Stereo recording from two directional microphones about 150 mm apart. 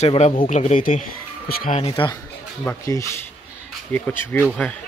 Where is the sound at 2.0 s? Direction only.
35° left (ahead or behind).